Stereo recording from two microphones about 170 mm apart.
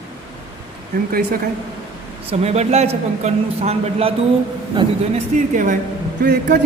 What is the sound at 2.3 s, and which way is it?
A man's voice, 40° right (ahead or behind).